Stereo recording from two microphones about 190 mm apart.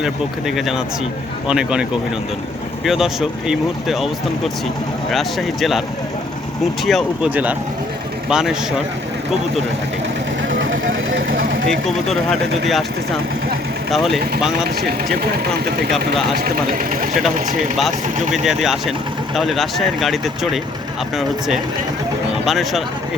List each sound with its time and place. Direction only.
0.0 s speech: centre (ahead or behind)
6.8 s speech: 5° right (ahead or behind)
10.5 s vehicle: 90° right
11.7 s speech: centre (ahead or behind)
13.9 s speech: centre (ahead or behind)
16.4 s speech: 45° right (ahead or behind)
18.4 s speech: centre (ahead or behind)